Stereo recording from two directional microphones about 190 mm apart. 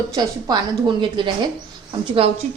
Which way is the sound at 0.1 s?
20° right (ahead or behind).